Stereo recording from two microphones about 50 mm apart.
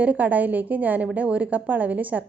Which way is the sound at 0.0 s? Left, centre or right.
Right.